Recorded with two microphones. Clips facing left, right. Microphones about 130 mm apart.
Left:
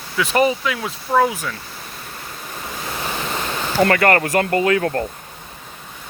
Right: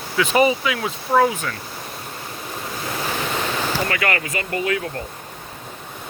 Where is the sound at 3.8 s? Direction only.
50° left (ahead or behind).